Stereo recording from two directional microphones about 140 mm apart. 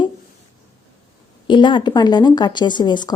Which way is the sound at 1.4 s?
35° left (ahead or behind).